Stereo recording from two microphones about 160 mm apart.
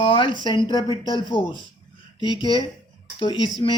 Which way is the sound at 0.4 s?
30° left (ahead or behind).